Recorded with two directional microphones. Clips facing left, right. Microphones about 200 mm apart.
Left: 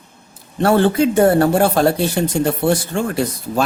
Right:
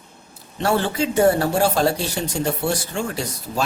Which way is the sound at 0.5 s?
55° left (ahead or behind).